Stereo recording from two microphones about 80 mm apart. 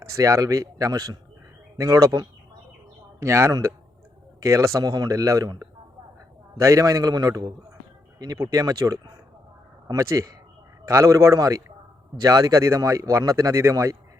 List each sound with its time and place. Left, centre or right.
0.0 s speech: right